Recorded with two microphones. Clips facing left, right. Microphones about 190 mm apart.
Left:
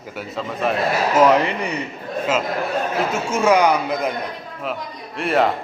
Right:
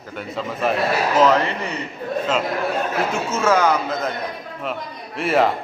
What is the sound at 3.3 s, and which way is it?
Speech, 15° left (ahead or behind).